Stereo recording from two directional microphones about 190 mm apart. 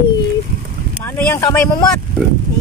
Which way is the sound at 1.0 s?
15° left (ahead or behind).